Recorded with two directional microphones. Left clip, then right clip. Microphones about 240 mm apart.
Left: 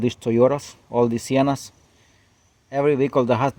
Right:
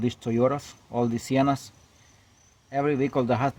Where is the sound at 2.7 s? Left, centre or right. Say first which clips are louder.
Left 6 dB; left.